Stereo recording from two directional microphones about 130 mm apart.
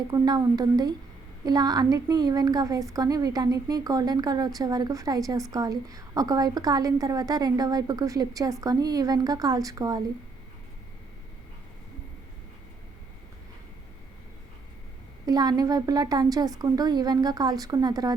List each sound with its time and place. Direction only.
0.1 s a woman's voice: 30° right (ahead or behind)
15.3 s a woman's voice: 30° right (ahead or behind)